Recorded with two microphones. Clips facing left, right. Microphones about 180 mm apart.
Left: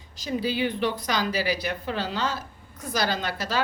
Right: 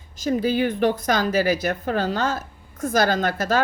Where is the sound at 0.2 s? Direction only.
50° right (ahead or behind).